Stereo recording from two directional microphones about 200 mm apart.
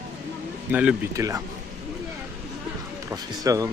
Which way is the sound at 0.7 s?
10° right (ahead or behind).